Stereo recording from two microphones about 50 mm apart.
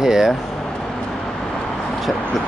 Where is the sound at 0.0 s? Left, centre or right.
Centre.